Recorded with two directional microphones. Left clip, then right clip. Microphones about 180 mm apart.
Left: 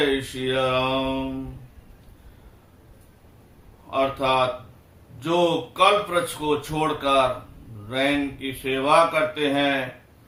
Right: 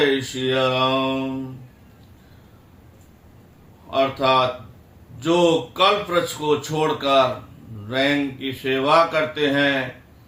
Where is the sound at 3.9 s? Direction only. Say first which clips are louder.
Right 3 dB; 15° left (ahead or behind).